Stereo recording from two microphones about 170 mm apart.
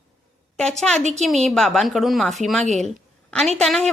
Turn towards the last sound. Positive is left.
turn(degrees=5)  # may be behind; listen again after turning